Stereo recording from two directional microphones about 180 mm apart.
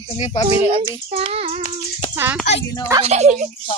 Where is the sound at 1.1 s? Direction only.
35° right (ahead or behind).